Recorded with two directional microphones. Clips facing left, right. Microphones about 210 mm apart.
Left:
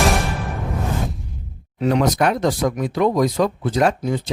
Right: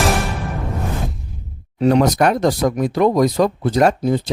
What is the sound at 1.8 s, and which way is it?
Speech, 40° right (ahead or behind).